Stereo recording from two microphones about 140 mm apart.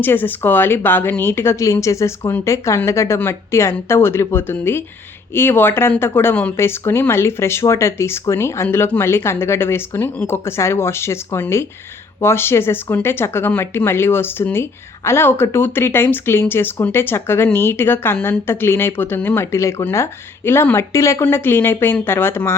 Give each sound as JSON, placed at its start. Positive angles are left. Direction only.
{"t": 0.0, "sound": "speech", "side_deg": 15}